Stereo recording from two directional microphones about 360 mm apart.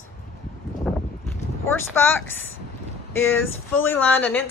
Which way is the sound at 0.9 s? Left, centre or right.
Centre.